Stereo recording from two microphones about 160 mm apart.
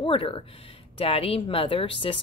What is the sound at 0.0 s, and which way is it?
Speech, 35° left (ahead or behind).